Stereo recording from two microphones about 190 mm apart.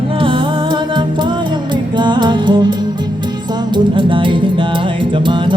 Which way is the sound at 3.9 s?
25° right (ahead or behind).